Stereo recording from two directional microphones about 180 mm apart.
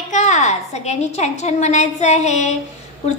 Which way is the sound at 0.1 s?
40° left (ahead or behind).